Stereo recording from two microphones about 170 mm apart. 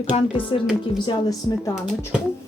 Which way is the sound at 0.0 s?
30° left (ahead or behind).